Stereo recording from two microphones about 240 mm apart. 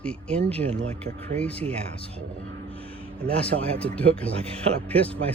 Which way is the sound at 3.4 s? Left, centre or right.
Centre.